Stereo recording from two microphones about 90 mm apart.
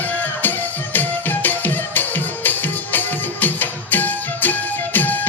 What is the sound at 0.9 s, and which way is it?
Music, 20° left (ahead or behind).